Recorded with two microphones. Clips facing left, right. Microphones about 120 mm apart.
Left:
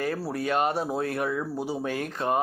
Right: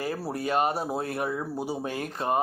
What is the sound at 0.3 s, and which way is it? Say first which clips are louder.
Speech: even; 35° right (ahead or behind).